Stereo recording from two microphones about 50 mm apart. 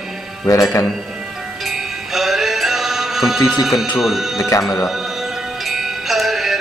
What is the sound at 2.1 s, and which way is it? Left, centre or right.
Music, centre.